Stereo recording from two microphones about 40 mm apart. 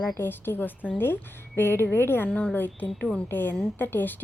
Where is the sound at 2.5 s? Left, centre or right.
Left.